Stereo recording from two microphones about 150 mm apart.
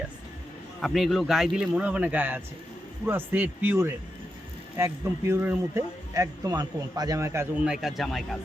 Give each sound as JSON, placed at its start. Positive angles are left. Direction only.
{"t": 0.8, "sound": "a man's voice", "side_deg": 0}
{"t": 7.6, "sound": "a man's voice", "side_deg": -5}